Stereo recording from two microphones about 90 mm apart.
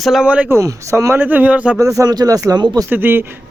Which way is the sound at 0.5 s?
35° right (ahead or behind).